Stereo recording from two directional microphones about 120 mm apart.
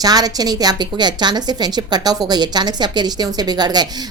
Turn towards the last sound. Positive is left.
turn(degrees=-35)  # may be behind; listen again after turning